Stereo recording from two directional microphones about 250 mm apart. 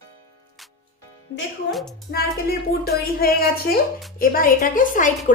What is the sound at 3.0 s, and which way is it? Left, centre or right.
A woman's voice, left.